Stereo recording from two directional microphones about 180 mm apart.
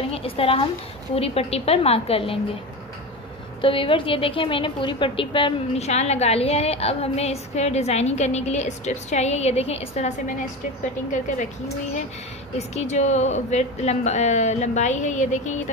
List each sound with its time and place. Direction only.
0.1 s a sound: 30° left (ahead or behind)
1.1 s a woman's voice: 35° left (ahead or behind)
3.6 s a woman's voice: 30° left (ahead or behind)
12.5 s a woman's voice: 40° left (ahead or behind)